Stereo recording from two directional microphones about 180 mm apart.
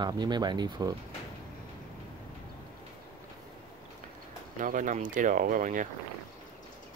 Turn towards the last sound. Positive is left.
turn(degrees=-45)  # may be behind; listen again after turning